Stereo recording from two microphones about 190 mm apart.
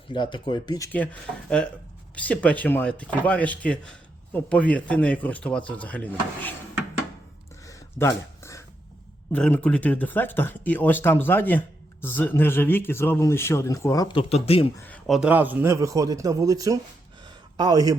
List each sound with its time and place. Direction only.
0.1 s speech: 25° left (ahead or behind)
0.9 s speech: 10° left (ahead or behind)
7.6 s a sound: 15° left (ahead or behind)
9.3 s speech: 5° left (ahead or behind); by 14.7 s 30° left (ahead or behind)
14.8 s a man's voice: 5° left (ahead or behind); by 16.7 s 15° right (ahead or behind)
17.2 s a sound: 20° right (ahead or behind)